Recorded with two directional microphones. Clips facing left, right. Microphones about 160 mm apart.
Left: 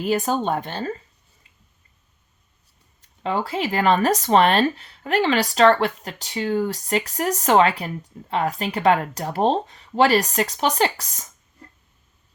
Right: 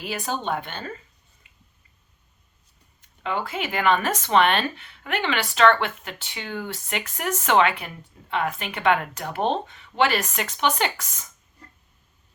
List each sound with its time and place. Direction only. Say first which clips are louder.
0.0 s speech: left 7 dB; 45° left (ahead or behind)
3.0 s speech: left 4 dB; 35° left (ahead or behind)